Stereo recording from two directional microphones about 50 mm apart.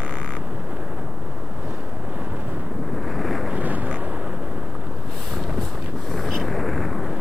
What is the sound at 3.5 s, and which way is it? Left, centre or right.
Vehicle, right.